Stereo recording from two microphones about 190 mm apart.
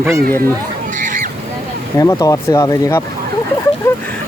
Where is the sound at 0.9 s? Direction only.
45° right (ahead or behind).